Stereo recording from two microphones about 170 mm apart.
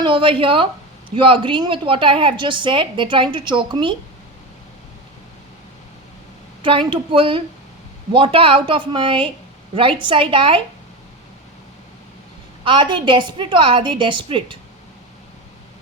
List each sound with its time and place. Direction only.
0.0 s a woman's voice: 30° right (ahead or behind)
6.6 s a woman's voice: 30° right (ahead or behind)
12.6 s a woman's voice: 30° right (ahead or behind)